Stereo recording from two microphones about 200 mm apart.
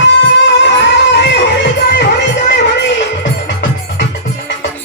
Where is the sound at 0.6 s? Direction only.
60° left (ahead or behind).